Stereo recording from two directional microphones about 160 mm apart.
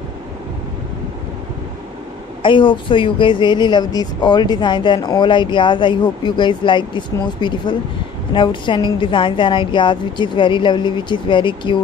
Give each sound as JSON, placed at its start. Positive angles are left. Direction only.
{"t": 2.4, "sound": "a woman's voice", "side_deg": 30}